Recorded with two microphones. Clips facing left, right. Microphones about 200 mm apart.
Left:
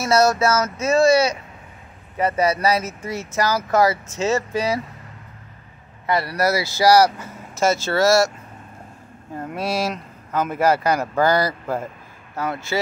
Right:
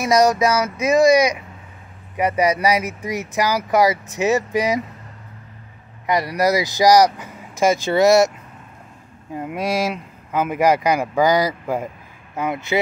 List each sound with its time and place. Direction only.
0.0 s speech: 15° right (ahead or behind)
6.0 s speech: 15° right (ahead or behind)
9.3 s speech: 15° right (ahead or behind)